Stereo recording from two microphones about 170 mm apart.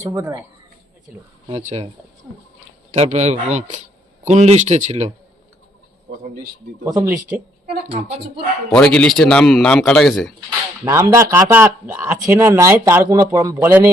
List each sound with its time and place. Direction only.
0.0 s speech: 15° right (ahead or behind)
1.5 s speech: 35° right (ahead or behind)
2.9 s speech: 40° right (ahead or behind)
6.8 s speech: 20° right (ahead or behind)
8.7 s a man's voice: 5° left (ahead or behind)
10.8 s speech: 15° right (ahead or behind)